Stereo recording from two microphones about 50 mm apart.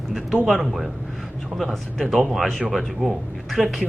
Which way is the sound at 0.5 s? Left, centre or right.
Centre.